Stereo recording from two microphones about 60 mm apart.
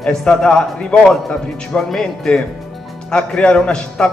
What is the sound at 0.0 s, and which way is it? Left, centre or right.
Speech, centre.